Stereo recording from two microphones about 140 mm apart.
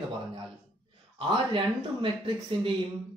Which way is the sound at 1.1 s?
35° right (ahead or behind).